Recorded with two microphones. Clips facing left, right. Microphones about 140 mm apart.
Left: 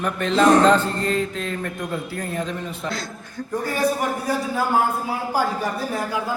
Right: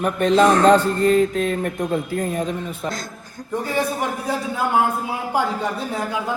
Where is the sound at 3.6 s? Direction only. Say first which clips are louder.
Left 1 dB; 20° right (ahead or behind).